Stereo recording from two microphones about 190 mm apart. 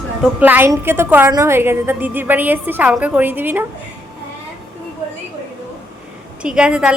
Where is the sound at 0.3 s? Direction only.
10° right (ahead or behind).